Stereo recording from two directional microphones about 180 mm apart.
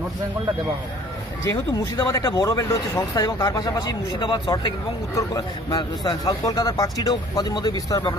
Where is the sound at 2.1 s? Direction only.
20° left (ahead or behind).